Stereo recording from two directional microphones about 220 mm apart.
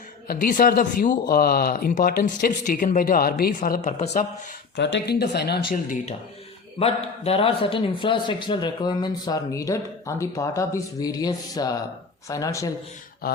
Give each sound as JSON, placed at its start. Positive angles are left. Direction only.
{"t": 0.3, "sound": "speech", "side_deg": 40}
{"t": 4.8, "sound": "speech", "side_deg": 55}
{"t": 5.7, "sound": "a man's voice", "side_deg": 35}
{"t": 13.2, "sound": "speech", "side_deg": 45}